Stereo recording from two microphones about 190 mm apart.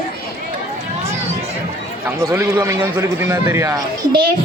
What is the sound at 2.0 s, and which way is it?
A man's voice, 15° right (ahead or behind).